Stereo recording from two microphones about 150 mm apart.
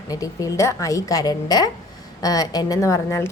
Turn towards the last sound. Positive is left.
turn(degrees=20)  # may be behind; listen again after turning